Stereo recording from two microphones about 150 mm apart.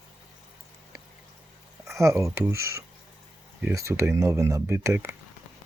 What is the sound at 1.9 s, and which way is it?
Speech, 20° right (ahead or behind).